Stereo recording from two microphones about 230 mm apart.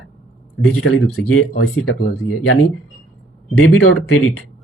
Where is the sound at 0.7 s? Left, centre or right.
Left.